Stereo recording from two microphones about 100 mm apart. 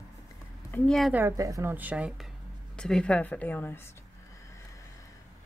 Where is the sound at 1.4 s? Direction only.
35° right (ahead or behind).